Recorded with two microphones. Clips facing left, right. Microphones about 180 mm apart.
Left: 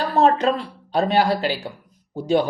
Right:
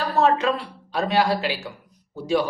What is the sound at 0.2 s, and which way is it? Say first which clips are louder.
Speech: left 2 dB; 35° left (ahead or behind).